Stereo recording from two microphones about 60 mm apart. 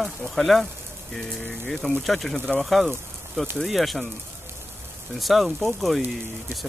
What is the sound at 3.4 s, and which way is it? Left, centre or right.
Speech, centre.